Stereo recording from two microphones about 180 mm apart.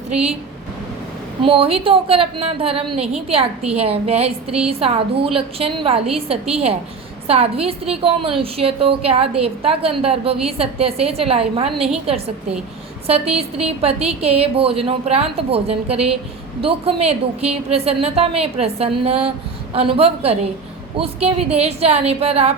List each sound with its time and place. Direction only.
0.1 s a woman's voice: 5° right (ahead or behind)
1.4 s a woman's voice: 30° right (ahead or behind)